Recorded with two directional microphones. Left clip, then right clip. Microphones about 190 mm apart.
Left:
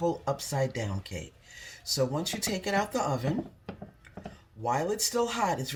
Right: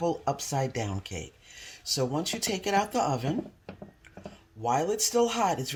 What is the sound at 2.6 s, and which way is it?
Speech, 40° right (ahead or behind).